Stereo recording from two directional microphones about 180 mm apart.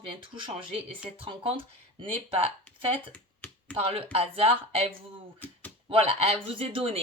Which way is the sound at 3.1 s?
10° left (ahead or behind).